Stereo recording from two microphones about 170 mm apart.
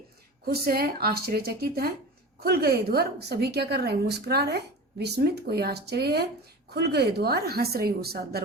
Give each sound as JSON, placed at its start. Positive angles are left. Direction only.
{"t": 0.4, "sound": "a woman's voice", "side_deg": -65}